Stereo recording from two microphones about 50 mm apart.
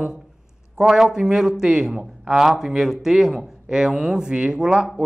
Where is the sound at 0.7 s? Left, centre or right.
Centre.